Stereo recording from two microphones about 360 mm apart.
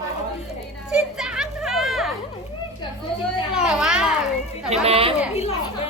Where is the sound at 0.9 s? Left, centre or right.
Centre.